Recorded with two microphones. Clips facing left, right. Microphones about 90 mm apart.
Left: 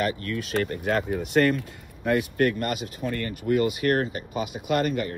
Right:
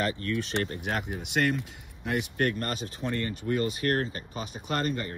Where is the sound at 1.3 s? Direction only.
60° left (ahead or behind).